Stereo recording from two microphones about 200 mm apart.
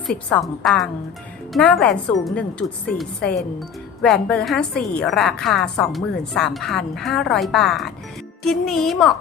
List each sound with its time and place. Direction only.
0.1 s a woman's voice: 5° left (ahead or behind)